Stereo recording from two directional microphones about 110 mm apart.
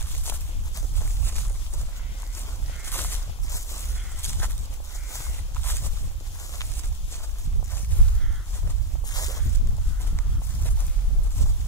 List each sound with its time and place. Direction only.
0.2 s walk: 20° left (ahead or behind)
2.8 s a sound: 20° left (ahead or behind)
5.1 s walk: 20° left (ahead or behind)
9.1 s walk: 35° left (ahead or behind)